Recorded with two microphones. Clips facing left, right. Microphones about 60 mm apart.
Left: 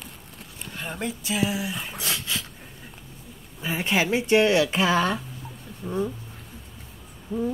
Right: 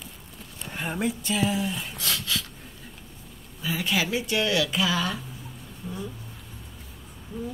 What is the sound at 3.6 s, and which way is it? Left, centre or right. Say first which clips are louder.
Speech: left 2 dB; left.